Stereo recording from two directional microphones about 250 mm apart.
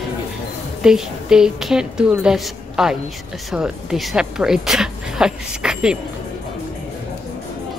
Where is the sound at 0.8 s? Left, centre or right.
Centre.